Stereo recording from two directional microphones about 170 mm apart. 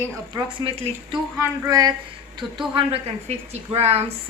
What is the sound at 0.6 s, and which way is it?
Speech, 35° right (ahead or behind).